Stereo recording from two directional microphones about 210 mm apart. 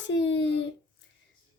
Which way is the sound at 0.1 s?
55° left (ahead or behind).